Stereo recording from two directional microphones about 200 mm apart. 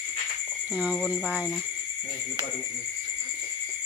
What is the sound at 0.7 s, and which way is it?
Speech, 5° right (ahead or behind).